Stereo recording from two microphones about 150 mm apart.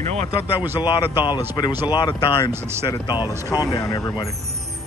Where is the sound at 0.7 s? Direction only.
30° left (ahead or behind).